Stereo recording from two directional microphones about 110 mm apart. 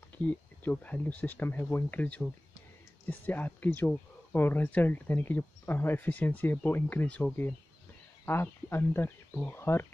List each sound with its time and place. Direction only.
0.2 s speech: 15° left (ahead or behind)